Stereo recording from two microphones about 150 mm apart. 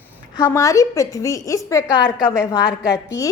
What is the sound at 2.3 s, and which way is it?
Speech, 5° right (ahead or behind).